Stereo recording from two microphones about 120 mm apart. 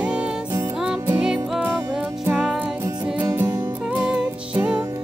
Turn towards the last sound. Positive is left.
turn(degrees=-10)  # may be behind; listen again after turning